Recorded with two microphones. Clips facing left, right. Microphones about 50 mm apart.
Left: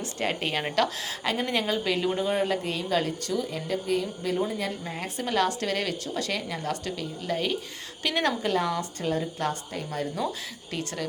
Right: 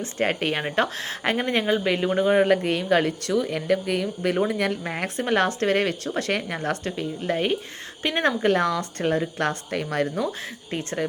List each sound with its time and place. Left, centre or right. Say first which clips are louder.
0.0 s a woman's voice: right 5 dB; right
10.7 s speech: right 5 dB; right